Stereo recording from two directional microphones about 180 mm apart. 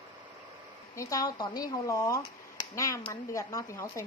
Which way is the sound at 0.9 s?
20° left (ahead or behind).